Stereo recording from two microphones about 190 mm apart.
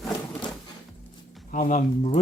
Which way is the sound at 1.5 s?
40° left (ahead or behind).